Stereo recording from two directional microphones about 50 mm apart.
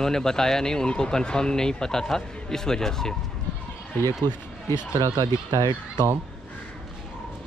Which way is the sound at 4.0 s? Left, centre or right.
Left.